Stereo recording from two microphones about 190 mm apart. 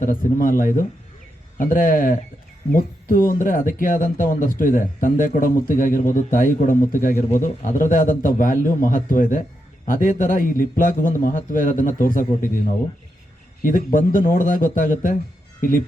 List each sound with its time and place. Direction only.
0.0 s a man's voice: 45° left (ahead or behind)